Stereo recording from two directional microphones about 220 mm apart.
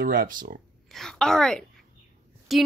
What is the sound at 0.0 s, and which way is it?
Speech, 40° right (ahead or behind).